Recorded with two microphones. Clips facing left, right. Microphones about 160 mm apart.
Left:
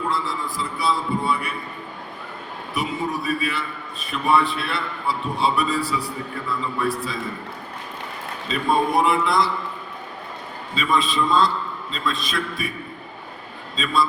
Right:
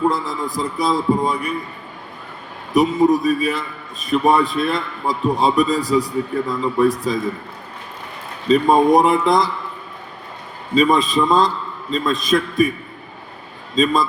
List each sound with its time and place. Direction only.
0.1 s a man's voice: 45° right (ahead or behind)
2.7 s a man's voice: 40° right (ahead or behind)
8.4 s a man's voice: 40° right (ahead or behind)
10.8 s a man's voice: 45° right (ahead or behind)
13.7 s a man's voice: 40° right (ahead or behind)